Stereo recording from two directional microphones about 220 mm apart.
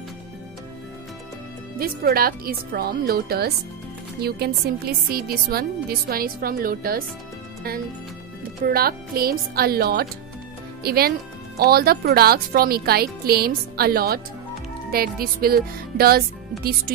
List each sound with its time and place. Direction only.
1.8 s speech: 40° right (ahead or behind)
8.6 s speech: 45° right (ahead or behind)